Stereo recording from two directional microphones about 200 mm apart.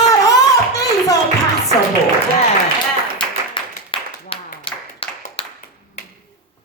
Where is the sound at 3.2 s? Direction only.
25° left (ahead or behind).